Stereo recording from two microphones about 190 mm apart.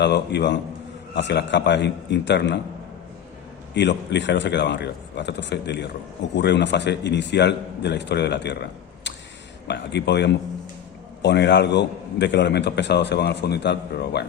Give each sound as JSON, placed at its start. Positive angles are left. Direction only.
{"t": 0.0, "sound": "a man's voice", "side_deg": 65}
{"t": 3.8, "sound": "a man's voice", "side_deg": 70}
{"t": 9.1, "sound": "a sound", "side_deg": 70}
{"t": 9.6, "sound": "a man's voice", "side_deg": 65}